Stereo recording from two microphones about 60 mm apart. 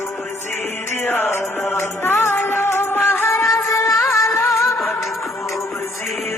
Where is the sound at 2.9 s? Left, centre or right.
Left.